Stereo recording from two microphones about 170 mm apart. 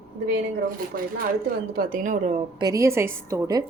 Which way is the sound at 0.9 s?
60° right (ahead or behind).